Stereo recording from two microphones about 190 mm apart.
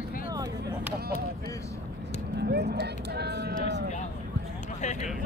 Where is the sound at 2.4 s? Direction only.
60° right (ahead or behind).